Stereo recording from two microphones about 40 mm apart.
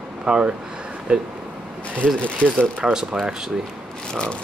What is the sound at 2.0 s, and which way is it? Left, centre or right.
Speech, left.